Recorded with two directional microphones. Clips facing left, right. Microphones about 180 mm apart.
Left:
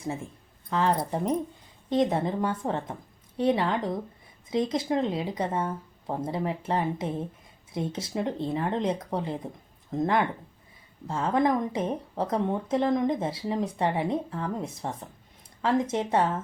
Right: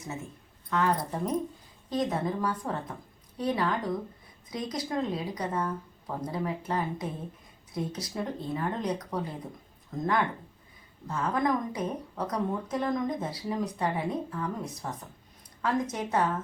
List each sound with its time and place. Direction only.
0.7 s speech: 30° left (ahead or behind)
11.1 s speech: 25° left (ahead or behind)